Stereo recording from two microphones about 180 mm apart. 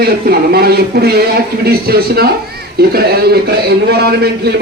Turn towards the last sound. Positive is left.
turn(degrees=-60)  # may be behind; listen again after turning